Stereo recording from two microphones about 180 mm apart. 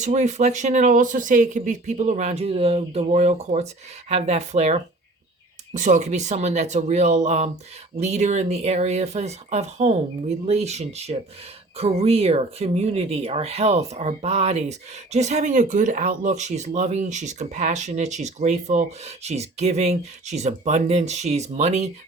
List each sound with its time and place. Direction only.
0.0 s speech: 40° right (ahead or behind)